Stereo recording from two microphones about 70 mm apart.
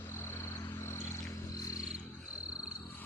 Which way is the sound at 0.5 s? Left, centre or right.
Left.